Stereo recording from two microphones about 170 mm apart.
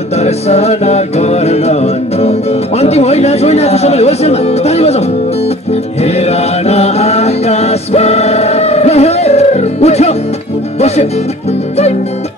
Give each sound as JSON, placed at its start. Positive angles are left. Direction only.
{"t": 0.2, "sound": "music", "side_deg": 40}